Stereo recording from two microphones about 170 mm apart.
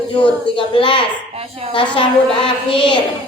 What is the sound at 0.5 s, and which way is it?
Speech, 30° left (ahead or behind).